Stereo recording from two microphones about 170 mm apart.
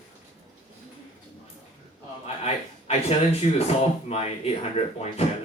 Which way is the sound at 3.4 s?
40° left (ahead or behind).